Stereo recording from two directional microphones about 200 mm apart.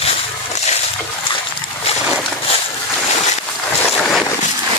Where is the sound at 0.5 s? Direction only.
35° left (ahead or behind).